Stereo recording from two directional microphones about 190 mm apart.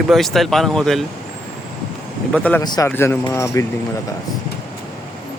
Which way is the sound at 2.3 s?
5° left (ahead or behind).